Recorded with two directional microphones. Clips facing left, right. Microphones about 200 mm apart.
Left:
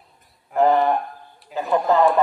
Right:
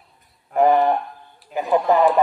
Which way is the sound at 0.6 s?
15° right (ahead or behind).